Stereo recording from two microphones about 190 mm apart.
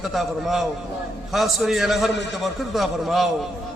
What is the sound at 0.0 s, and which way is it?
A man's voice, centre (ahead or behind).